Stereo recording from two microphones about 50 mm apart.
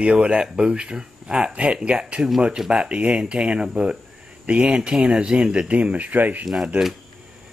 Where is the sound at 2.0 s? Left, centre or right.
Centre; by 6.4 s right.